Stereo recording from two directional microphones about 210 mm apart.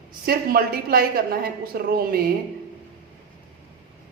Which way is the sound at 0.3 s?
45° right (ahead or behind).